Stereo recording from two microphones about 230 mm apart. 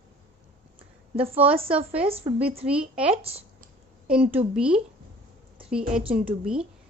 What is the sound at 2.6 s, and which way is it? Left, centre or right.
Speech, centre.